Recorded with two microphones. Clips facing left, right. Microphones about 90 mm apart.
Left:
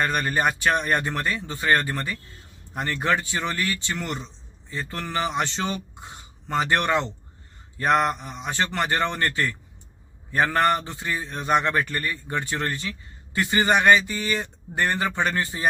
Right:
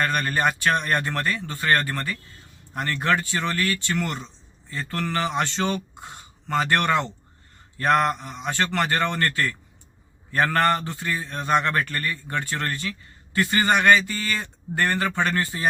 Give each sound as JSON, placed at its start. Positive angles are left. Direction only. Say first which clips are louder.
{"t": 0.0, "sound": "a man's voice", "louder": "even", "side_deg": 15}